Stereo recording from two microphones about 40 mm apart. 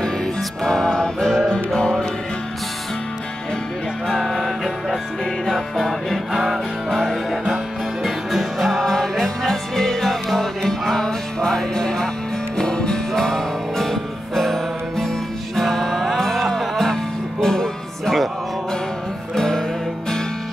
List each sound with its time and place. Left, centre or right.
0.7 s music: centre
4.1 s music: centre
19.3 s music: centre